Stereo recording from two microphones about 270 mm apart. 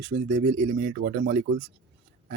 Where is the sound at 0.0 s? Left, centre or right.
Right.